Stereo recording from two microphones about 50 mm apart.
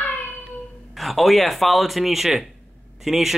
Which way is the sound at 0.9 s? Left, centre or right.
Centre.